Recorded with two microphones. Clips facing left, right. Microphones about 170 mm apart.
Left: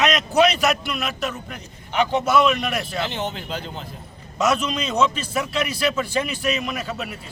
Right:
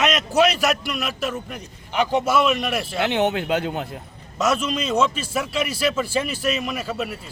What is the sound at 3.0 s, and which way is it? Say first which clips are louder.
Speech: right 6 dB; 65° right (ahead or behind).